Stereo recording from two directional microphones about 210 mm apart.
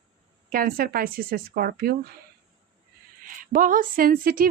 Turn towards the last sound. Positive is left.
turn(degrees=-45)  # may be behind; listen again after turning